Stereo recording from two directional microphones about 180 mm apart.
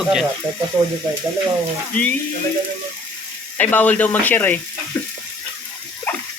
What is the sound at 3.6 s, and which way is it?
Speech, 10° left (ahead or behind).